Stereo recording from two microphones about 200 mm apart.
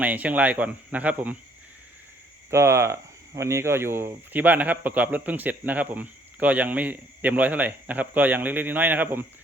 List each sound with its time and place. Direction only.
0.0 s speech: 5° right (ahead or behind)
2.5 s speech: 15° right (ahead or behind)